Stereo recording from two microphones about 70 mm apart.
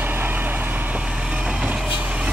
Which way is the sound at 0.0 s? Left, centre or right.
Right.